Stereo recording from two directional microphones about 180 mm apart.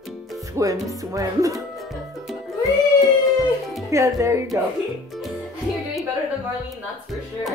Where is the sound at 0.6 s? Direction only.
20° right (ahead or behind).